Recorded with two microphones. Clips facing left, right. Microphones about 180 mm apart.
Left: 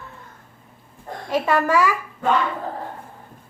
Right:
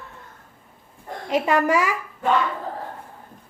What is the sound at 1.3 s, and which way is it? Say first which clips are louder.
Speech: even; 20° right (ahead or behind).